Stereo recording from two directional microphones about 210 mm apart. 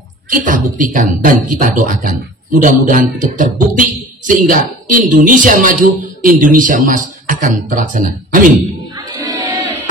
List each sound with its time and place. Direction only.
0.3 s a woman's voice: 40° right (ahead or behind)
8.9 s music: 15° right (ahead or behind)